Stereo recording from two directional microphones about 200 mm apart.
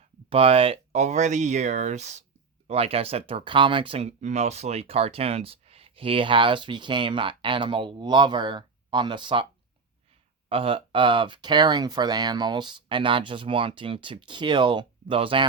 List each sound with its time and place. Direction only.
0.3 s speech: 30° right (ahead or behind)
10.5 s speech: 25° right (ahead or behind)